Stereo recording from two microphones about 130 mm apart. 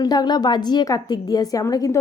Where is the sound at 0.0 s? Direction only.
30° left (ahead or behind).